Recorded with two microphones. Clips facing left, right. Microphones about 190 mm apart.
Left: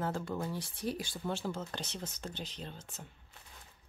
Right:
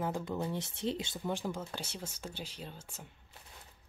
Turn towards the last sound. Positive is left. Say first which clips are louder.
# left 1 dB
turn(degrees=-10)  # may be behind; listen again after turning